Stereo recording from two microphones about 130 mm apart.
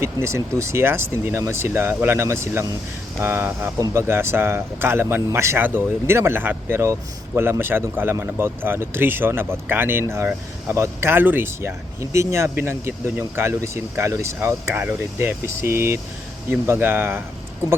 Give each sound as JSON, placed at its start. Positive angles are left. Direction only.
{"t": 0.0, "sound": "a man's voice", "side_deg": -20}